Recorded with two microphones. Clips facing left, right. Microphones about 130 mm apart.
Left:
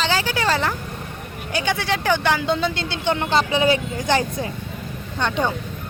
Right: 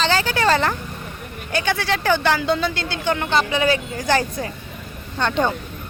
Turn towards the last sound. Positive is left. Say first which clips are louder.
# right 2 dB
turn(degrees=10)  # may be behind; listen again after turning